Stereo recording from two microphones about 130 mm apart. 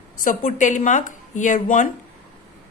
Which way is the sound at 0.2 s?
85° left.